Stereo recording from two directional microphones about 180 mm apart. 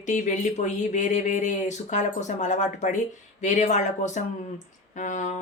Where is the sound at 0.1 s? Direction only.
45° left (ahead or behind).